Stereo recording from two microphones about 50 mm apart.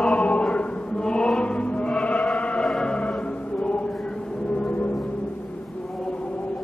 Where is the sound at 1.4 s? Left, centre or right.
Left.